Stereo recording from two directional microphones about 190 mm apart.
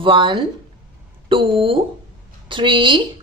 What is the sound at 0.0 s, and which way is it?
A woman's voice, 25° right (ahead or behind).